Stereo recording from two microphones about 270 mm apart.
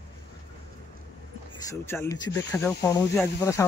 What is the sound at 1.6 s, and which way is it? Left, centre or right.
Speech, centre.